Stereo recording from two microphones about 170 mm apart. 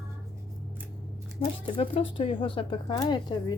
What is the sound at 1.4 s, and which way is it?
Speech, 35° left (ahead or behind).